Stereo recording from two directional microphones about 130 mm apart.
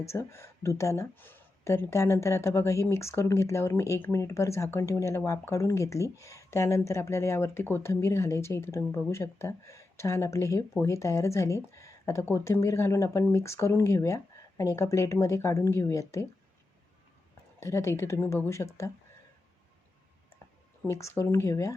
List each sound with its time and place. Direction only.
0.0 s speech: 20° left (ahead or behind)
17.6 s speech: 20° left (ahead or behind)
20.8 s speech: 20° left (ahead or behind)